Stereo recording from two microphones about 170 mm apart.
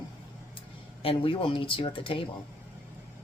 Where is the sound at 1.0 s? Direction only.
30° left (ahead or behind).